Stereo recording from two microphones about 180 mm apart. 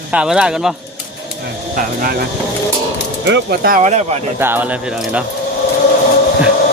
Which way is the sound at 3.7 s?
40° right (ahead or behind).